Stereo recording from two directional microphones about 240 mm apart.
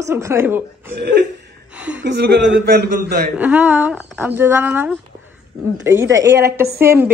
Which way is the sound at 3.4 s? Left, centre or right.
Centre.